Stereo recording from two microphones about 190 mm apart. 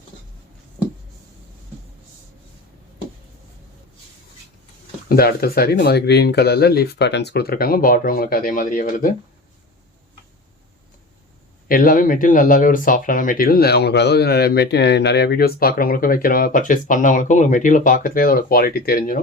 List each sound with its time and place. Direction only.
5.0 s speech: 55° left (ahead or behind)
11.7 s speech: 50° left (ahead or behind)